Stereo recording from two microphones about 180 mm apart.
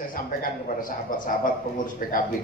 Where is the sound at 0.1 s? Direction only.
50° left (ahead or behind).